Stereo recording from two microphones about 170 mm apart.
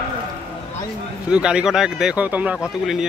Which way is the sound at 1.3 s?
5° right (ahead or behind).